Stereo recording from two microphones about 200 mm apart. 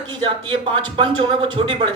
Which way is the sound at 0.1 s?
25° right (ahead or behind).